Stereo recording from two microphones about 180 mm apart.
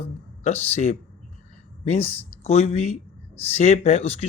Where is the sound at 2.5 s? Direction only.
35° left (ahead or behind).